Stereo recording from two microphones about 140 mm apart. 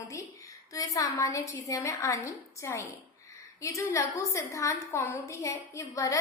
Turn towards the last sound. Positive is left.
turn(degrees=20)  # may be behind; listen again after turning